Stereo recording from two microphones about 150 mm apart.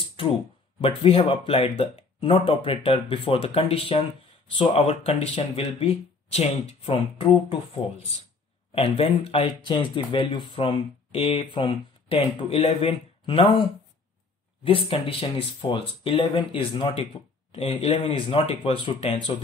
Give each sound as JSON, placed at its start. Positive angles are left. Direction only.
{"t": 0.7, "sound": "speech", "side_deg": 40}
{"t": 8.7, "sound": "speech", "side_deg": 40}
{"t": 14.6, "sound": "speech", "side_deg": 35}